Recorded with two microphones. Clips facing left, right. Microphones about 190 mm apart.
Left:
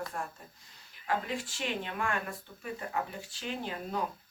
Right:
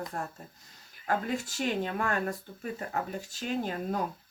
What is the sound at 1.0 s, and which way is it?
Speech, 45° right (ahead or behind).